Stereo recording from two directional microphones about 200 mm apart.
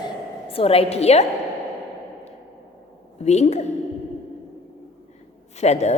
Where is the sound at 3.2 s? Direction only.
35° left (ahead or behind).